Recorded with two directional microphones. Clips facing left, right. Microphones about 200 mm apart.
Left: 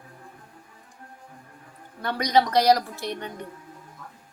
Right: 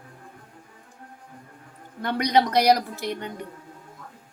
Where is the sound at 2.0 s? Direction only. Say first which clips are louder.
Right 1 dB; 20° right (ahead or behind).